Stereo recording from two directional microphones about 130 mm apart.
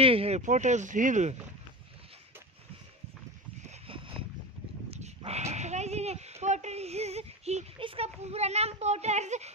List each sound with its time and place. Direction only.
0.0 s a sound: 45° right (ahead or behind)
0.5 s speech: 65° right (ahead or behind)
3.7 s boat: 45° right (ahead or behind)
4.9 s dog: 55° right (ahead or behind)
7.8 s speech: 45° right (ahead or behind)